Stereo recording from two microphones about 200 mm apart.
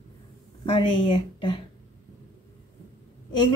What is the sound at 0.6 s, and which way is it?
Speech, 25° left (ahead or behind).